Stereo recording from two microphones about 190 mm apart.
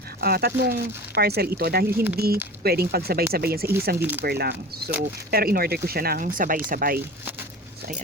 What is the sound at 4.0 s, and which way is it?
Speech, 10° right (ahead or behind).